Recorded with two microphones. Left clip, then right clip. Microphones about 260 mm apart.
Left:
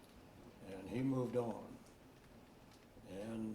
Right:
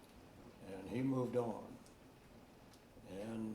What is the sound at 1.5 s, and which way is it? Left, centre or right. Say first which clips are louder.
Speech: right 1 dB; right.